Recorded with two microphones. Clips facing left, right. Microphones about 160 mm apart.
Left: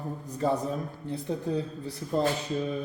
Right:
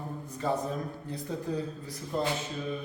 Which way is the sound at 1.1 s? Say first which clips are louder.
Left 5 dB; 30° left (ahead or behind).